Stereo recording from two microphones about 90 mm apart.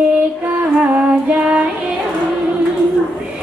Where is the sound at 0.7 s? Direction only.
15° right (ahead or behind).